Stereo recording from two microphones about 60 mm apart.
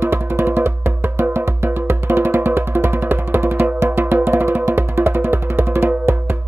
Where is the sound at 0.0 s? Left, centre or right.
Right.